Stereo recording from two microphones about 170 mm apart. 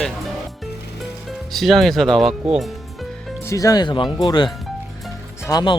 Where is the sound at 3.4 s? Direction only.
20° left (ahead or behind).